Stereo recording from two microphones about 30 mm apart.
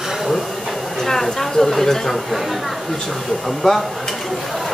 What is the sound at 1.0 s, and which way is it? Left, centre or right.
A woman's voice, centre.